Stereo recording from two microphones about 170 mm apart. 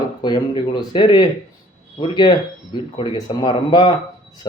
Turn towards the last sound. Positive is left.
turn(degrees=25)  # may be behind; listen again after turning